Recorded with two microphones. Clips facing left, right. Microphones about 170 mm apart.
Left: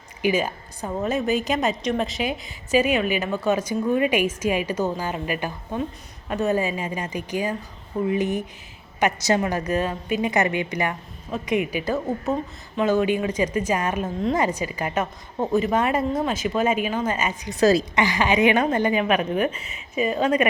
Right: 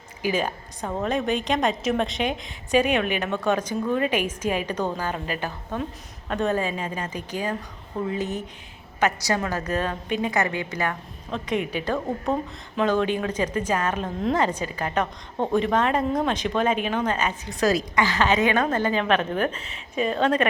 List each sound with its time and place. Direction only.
0.2 s a woman's voice: 10° left (ahead or behind)
17.5 s a woman's voice: 30° left (ahead or behind)
18.0 s a woman's voice: 15° left (ahead or behind)